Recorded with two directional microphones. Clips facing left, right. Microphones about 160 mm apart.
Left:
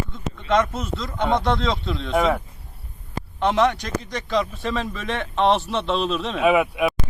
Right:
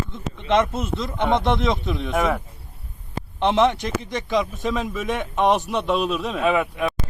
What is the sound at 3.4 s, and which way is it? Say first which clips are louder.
Speech: right 1 dB; 25° right (ahead or behind).